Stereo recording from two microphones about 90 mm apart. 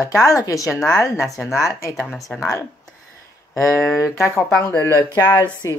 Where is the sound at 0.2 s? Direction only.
40° left (ahead or behind).